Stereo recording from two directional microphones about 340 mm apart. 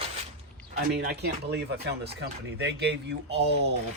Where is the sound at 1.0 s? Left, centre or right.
Right.